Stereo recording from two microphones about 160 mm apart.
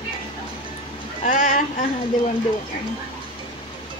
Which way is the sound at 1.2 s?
55° left (ahead or behind).